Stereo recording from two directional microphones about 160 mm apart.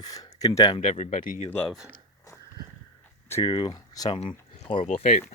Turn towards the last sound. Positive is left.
turn(degrees=45)  # may be behind; listen again after turning